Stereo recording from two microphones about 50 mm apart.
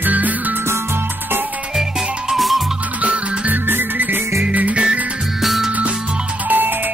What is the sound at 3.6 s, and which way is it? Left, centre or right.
Music, right.